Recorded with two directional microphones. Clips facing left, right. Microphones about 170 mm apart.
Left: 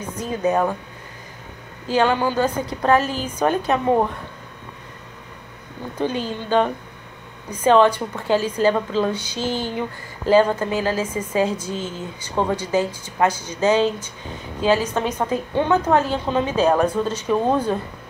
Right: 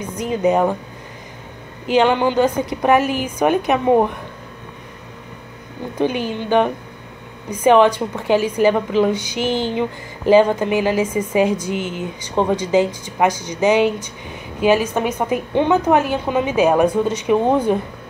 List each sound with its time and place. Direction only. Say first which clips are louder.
0.2 s speech: right 4 dB; 15° right (ahead or behind)
1.9 s speech: right 4 dB; 20° right (ahead or behind)
5.9 s speech: right 4 dB; 15° right (ahead or behind)